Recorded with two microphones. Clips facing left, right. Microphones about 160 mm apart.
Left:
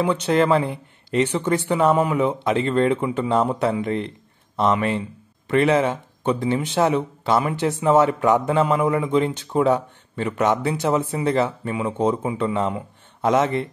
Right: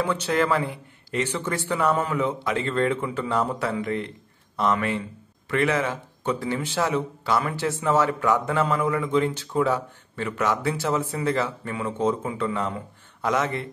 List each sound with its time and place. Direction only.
0.0 s speech: 15° left (ahead or behind)